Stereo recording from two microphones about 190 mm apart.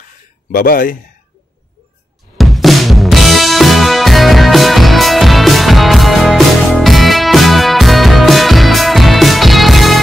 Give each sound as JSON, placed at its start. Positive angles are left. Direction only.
{"t": 0.5, "sound": "speech", "side_deg": 50}
{"t": 2.3, "sound": "music", "side_deg": 0}